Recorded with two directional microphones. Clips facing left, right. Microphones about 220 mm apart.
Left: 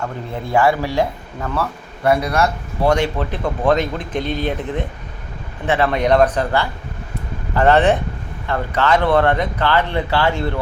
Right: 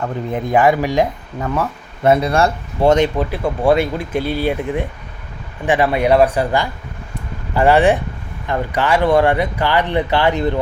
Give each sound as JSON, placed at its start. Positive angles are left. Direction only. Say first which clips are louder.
{"t": 0.3, "sound": "speech", "louder": "right 2 dB", "side_deg": -20}
{"t": 2.0, "sound": "speech", "louder": "right 3 dB", "side_deg": -25}
{"t": 3.3, "sound": "speech", "louder": "right 2 dB", "side_deg": -10}